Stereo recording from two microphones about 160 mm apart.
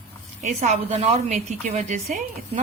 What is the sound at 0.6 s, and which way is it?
A woman's voice, 40° right (ahead or behind).